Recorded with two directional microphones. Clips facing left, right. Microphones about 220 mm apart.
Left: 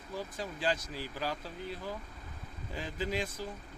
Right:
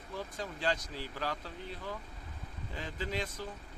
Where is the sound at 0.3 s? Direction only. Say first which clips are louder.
Left 1 dB; 10° left (ahead or behind).